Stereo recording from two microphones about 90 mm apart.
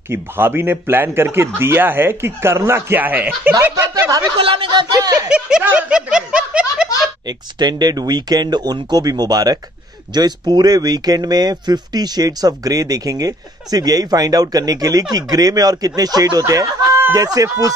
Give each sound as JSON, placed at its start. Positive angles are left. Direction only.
{"t": 0.1, "sound": "speech", "side_deg": -25}
{"t": 4.4, "sound": "speech", "side_deg": -75}
{"t": 4.8, "sound": "speech", "side_deg": -45}
{"t": 5.3, "sound": "speech", "side_deg": -15}
{"t": 7.2, "sound": "speech", "side_deg": -50}